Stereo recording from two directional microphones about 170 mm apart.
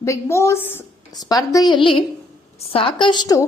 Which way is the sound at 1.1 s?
20° left (ahead or behind).